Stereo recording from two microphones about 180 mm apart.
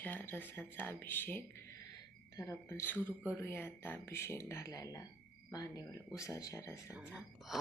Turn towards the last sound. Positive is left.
turn(degrees=-5)  # may be behind; listen again after turning